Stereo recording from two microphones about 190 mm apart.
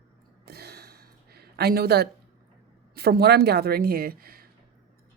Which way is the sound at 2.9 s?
55° right (ahead or behind).